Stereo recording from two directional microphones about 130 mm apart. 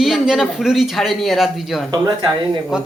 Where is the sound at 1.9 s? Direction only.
30° right (ahead or behind).